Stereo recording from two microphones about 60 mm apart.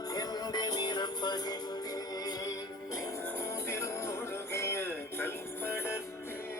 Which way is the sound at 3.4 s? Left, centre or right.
Left.